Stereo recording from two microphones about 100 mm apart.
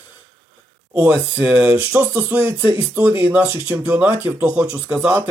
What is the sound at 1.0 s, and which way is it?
Speech, 15° right (ahead or behind).